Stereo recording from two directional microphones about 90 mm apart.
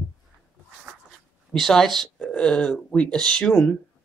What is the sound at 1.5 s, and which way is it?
Speech, 5° left (ahead or behind).